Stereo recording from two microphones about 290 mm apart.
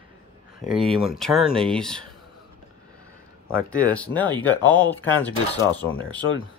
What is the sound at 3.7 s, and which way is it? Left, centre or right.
Speech, centre.